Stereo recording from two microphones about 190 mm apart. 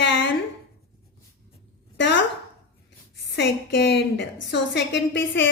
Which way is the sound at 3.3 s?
65° left (ahead or behind).